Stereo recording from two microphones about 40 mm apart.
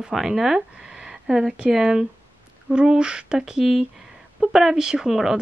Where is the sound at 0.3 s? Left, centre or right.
Centre.